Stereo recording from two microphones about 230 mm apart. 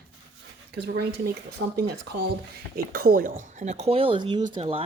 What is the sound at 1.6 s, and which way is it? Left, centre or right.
Speech, right.